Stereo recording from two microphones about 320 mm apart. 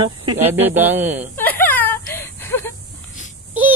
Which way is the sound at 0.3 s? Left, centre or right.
Centre.